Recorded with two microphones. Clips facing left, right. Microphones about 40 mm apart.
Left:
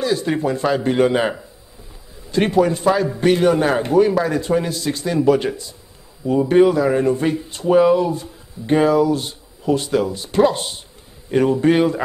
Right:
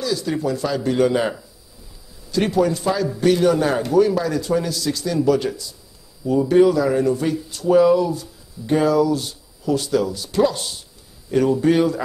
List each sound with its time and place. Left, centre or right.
0.0 s speech: left